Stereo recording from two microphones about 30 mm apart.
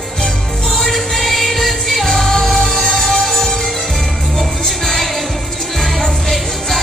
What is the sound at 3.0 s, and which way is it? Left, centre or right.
Music, centre.